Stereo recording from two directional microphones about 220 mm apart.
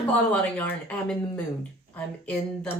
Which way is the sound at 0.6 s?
5° left (ahead or behind).